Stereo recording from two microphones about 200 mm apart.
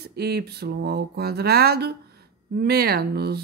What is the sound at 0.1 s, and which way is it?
Speech, 55° right (ahead or behind).